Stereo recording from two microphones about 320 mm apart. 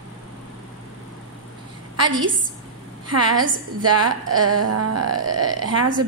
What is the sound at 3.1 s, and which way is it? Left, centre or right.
Speech, right.